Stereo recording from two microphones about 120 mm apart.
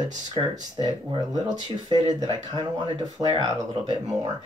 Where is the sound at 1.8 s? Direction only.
35° right (ahead or behind).